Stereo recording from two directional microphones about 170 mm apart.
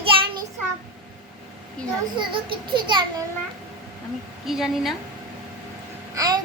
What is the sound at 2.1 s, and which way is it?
A child's voice, 30° right (ahead or behind).